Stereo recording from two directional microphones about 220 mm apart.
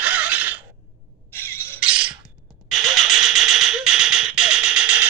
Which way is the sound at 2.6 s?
Centre (ahead or behind).